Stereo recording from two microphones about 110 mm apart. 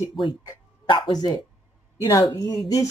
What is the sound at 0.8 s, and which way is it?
A woman's voice, 45° left (ahead or behind).